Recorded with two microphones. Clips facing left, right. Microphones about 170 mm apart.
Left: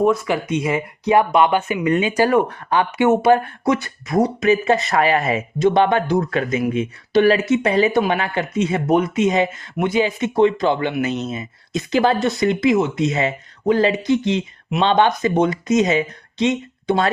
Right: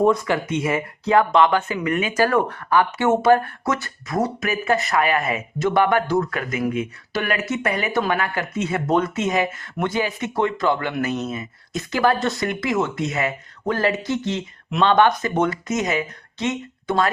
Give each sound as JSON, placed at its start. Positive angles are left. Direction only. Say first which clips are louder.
{"t": 0.3, "sound": "speech", "louder": "left 2 dB", "side_deg": 15}